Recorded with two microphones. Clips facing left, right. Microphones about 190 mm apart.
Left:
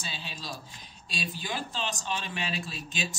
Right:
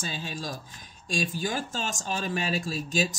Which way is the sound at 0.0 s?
45° right (ahead or behind).